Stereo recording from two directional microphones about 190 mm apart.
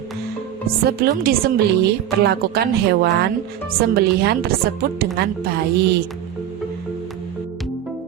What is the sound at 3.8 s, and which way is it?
Speech, 55° right (ahead or behind).